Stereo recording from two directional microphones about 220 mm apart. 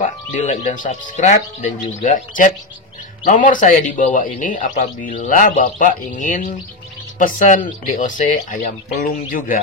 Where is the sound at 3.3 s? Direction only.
35° left (ahead or behind).